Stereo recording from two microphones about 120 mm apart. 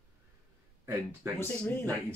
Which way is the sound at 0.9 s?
20° right (ahead or behind).